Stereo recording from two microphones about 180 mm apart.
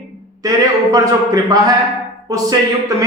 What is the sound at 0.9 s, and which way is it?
A woman's voice, 20° right (ahead or behind).